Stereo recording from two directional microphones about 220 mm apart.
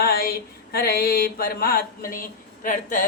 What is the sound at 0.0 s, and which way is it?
Mantra, 40° left (ahead or behind).